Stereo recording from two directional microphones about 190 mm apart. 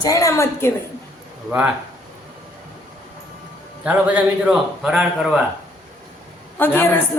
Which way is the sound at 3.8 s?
5° right (ahead or behind).